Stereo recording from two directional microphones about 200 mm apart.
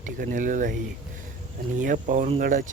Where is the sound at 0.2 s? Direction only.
40° right (ahead or behind).